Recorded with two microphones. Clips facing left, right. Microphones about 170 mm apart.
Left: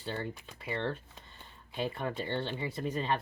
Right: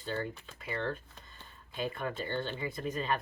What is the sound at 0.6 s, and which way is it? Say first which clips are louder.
Speech: left 1 dB; 25° left (ahead or behind).